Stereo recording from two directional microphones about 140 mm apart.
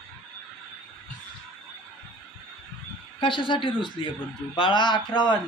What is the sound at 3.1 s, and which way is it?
Speech, 35° left (ahead or behind).